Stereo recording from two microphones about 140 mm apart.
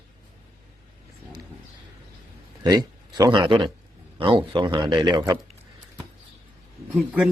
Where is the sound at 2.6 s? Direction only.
25° right (ahead or behind).